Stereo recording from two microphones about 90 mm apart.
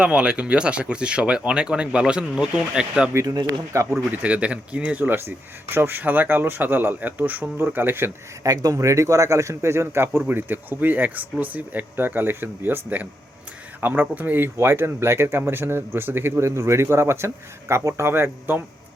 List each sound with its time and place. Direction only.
0.0 s speech: 10° right (ahead or behind)
3.1 s speech: 30° right (ahead or behind)
4.1 s speech: 15° right (ahead or behind)
8.4 s speech: 40° right (ahead or behind); by 18.6 s 25° right (ahead or behind)